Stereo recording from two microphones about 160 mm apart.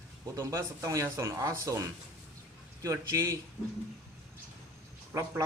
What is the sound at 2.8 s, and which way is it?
Speech, 20° right (ahead or behind).